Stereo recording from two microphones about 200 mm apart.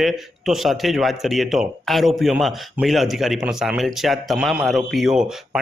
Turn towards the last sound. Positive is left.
turn(degrees=-5)  # may be behind; listen again after turning